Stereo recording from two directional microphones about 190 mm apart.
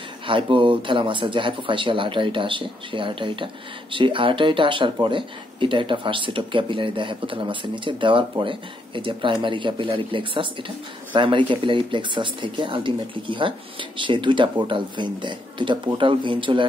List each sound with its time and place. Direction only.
0.3 s speech: 25° right (ahead or behind)